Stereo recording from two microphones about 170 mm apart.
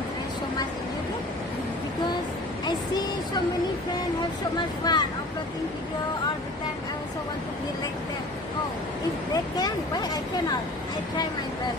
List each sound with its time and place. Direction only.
4.9 s speech: 25° left (ahead or behind)
9.3 s speech: 20° left (ahead or behind)